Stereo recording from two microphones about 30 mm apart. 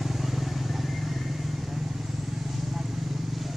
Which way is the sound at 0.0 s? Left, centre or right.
Centre.